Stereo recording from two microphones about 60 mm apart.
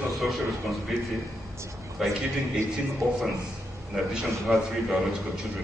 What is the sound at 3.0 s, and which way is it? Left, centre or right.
Speech, right.